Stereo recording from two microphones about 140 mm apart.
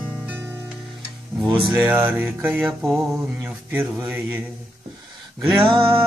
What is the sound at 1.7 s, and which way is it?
Music, 10° right (ahead or behind).